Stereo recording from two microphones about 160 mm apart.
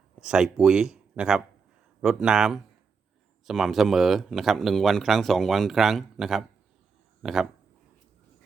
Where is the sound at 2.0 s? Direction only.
5° right (ahead or behind).